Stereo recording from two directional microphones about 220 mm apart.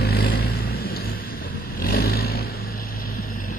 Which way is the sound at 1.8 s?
45° left (ahead or behind).